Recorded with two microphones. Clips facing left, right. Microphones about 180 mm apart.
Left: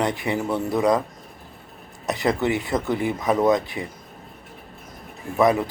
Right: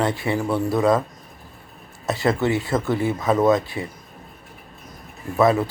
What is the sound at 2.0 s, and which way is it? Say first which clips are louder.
Speech: right 1 dB; 20° left (ahead or behind).